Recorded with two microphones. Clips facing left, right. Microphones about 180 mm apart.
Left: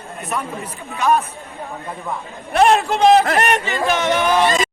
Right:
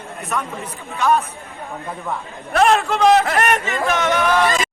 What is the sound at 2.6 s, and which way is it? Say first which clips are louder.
Speech: left 1 dB; 35° left (ahead or behind).